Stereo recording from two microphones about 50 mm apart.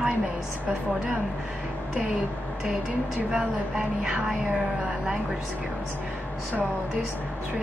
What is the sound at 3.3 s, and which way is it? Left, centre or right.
Speech, centre.